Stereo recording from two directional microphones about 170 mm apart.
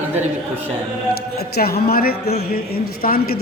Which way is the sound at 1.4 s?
65° left (ahead or behind).